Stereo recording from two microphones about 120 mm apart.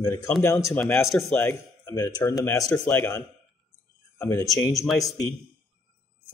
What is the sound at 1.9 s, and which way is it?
Speech, 30° left (ahead or behind).